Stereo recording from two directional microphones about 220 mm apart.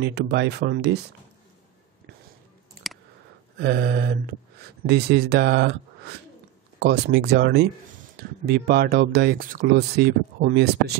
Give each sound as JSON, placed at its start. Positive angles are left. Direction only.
{"t": 0.0, "sound": "speech", "side_deg": -50}
{"t": 3.5, "sound": "speech", "side_deg": -45}